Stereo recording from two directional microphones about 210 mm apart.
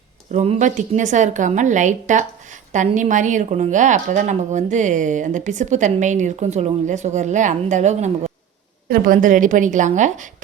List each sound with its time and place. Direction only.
0.3 s a woman's voice: 35° right (ahead or behind)